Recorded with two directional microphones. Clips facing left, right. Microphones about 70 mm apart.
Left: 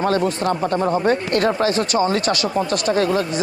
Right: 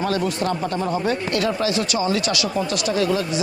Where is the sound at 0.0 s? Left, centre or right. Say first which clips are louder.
Left 3 dB; left.